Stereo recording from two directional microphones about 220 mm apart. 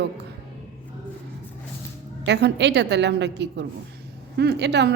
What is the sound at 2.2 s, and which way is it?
A woman's voice, 50° right (ahead or behind).